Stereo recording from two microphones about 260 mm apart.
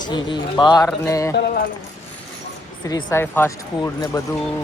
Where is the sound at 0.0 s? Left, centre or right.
Centre.